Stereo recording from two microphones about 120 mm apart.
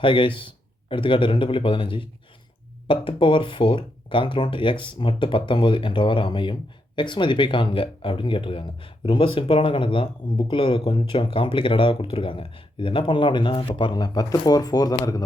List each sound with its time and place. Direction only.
0.0 s speech: 45° left (ahead or behind)